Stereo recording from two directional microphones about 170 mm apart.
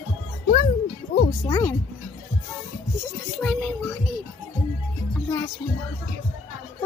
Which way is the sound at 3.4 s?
Centre (ahead or behind).